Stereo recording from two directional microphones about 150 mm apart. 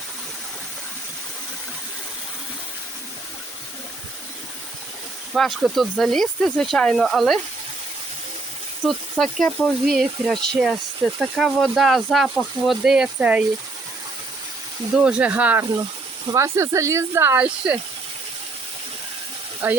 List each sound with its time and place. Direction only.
5.3 s speech: centre (ahead or behind)
8.8 s speech: centre (ahead or behind)
14.9 s speech: 5° right (ahead or behind)
19.6 s speech: 10° right (ahead or behind)